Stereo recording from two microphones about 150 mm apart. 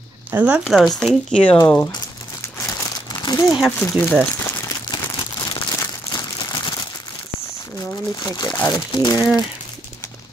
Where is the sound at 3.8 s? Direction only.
10° left (ahead or behind).